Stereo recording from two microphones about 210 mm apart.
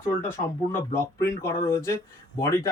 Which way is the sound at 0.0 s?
10° left (ahead or behind).